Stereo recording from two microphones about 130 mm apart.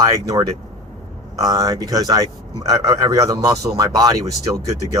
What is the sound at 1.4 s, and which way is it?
Speech, 25° right (ahead or behind).